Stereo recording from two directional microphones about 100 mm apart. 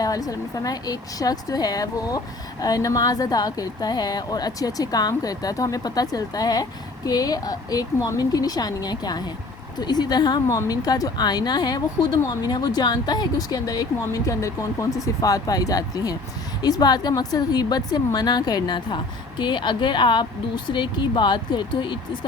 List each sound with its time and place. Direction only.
0.0 s a woman's voice: 35° left (ahead or behind); by 22.3 s 55° left (ahead or behind)